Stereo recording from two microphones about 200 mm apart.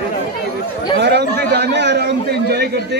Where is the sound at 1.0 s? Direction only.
60° right (ahead or behind).